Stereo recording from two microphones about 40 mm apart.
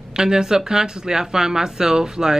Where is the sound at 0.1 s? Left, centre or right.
Centre.